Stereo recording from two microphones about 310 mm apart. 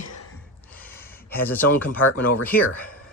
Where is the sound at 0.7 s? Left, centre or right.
Centre.